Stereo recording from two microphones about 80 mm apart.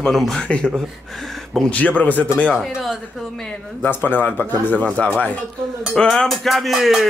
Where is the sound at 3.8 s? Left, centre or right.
Left.